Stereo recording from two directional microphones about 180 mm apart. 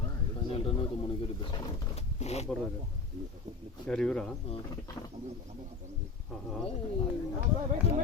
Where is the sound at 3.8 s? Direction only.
5° left (ahead or behind).